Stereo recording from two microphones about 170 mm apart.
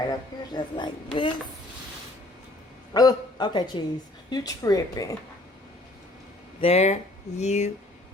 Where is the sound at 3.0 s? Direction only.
25° left (ahead or behind).